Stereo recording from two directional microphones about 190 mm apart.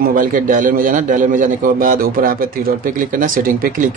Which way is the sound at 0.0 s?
45° right (ahead or behind).